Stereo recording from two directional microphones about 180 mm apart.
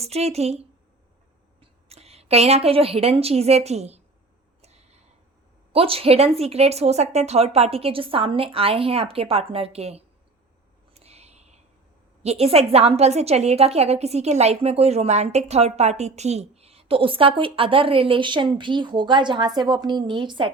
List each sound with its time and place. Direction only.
0.0 s a woman's voice: 35° right (ahead or behind)
1.9 s a woman's voice: 35° right (ahead or behind)
4.6 s a sound: 35° right (ahead or behind)
5.7 s a woman's voice: 30° right (ahead or behind)
10.9 s a sound: 35° right (ahead or behind)
12.2 s a woman's voice: 35° right (ahead or behind)